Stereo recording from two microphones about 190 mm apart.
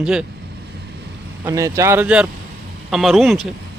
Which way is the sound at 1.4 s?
15° right (ahead or behind).